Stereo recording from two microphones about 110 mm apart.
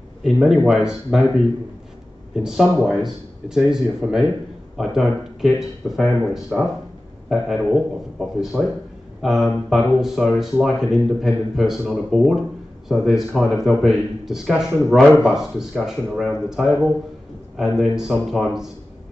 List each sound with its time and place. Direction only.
0.2 s speech: 5° right (ahead or behind)